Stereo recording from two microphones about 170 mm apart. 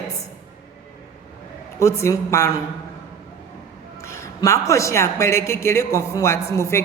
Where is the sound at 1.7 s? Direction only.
15° left (ahead or behind).